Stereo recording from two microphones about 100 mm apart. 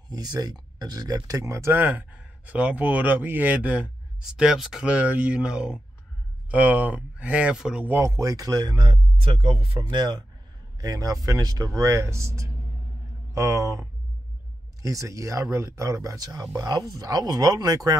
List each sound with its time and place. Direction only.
0.1 s speech: 40° right (ahead or behind); by 7.9 s 10° right (ahead or behind)
7.9 s speech: 30° right (ahead or behind); by 8.9 s 50° right (ahead or behind)
8.9 s speech: 60° right (ahead or behind)
9.9 s speech: 45° right (ahead or behind)
10.8 s speech: 35° right (ahead or behind)